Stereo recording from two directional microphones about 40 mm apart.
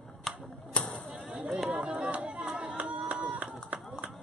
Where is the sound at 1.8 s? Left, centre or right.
Right.